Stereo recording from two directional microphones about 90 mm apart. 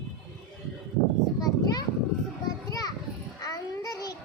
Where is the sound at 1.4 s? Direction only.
45° left (ahead or behind).